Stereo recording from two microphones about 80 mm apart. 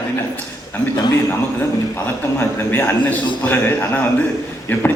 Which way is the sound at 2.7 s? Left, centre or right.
Left.